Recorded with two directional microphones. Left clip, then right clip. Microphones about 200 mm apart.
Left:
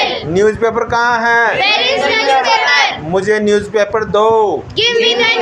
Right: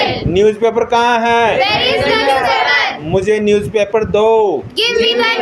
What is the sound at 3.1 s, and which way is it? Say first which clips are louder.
Speech: right 2 dB; 15° right (ahead or behind).